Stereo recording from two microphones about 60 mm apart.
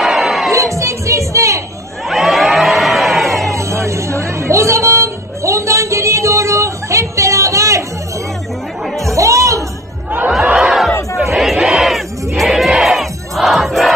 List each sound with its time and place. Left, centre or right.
0.0 s music: centre
0.5 s music: right
2.0 s crowd: centre
3.5 s a sound: right
9.1 s music: right
10.4 s a sound: centre
11.3 s battle cry: centre
11.7 s crowd: centre